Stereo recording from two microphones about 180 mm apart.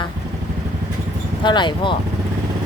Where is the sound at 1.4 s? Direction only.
25° left (ahead or behind).